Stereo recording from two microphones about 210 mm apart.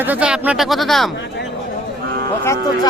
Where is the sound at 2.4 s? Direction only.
15° left (ahead or behind).